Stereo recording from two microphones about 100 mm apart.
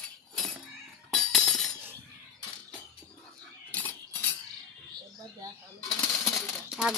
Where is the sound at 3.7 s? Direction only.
15° left (ahead or behind).